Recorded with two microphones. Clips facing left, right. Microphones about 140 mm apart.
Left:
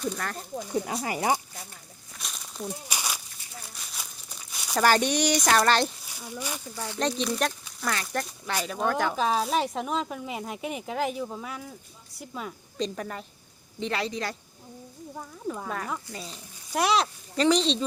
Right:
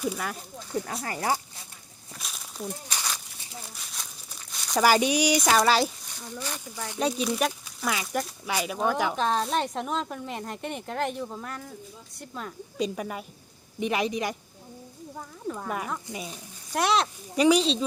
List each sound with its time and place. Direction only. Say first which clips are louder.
0.0 s a man's voice: right 1 dB; 5° right (ahead or behind)
0.6 s speech: left 2 dB; 15° left (ahead or behind)
2.1 s a sound: even; centre (ahead or behind)
2.6 s a sound: left 1 dB; 10° left (ahead or behind)
3.8 s crumpling: even; centre (ahead or behind)
4.8 s a woman's voice: right 1 dB; 10° right (ahead or behind)
6.1 s speech: left 1 dB; 10° left (ahead or behind)
6.8 s a man's voice: right 1 dB; 15° right (ahead or behind)
7.1 s a woman's voice: right 1 dB; 5° right (ahead or behind)
12.7 s a man's voice: right 2 dB; 10° right (ahead or behind)
15.1 s a woman's voice: left 1 dB; 5° left (ahead or behind)
16.0 s a man's voice: right 3 dB; 15° right (ahead or behind)
16.7 s a woman's voice: even; centre (ahead or behind)
17.3 s a woman's voice: right 2 dB; 10° right (ahead or behind)